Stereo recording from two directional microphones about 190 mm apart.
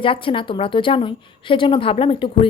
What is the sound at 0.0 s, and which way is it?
A woman's voice, 25° left (ahead or behind).